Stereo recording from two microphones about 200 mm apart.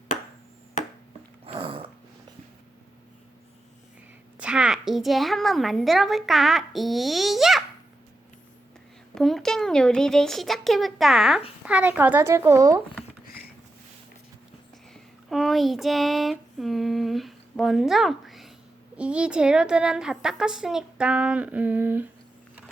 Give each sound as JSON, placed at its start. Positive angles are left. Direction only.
{"t": 1.5, "sound": "dog", "side_deg": -25}
{"t": 4.4, "sound": "a woman's voice", "side_deg": -5}
{"t": 9.1, "sound": "a woman's voice", "side_deg": 0}
{"t": 14.9, "sound": "a woman's voice", "side_deg": 0}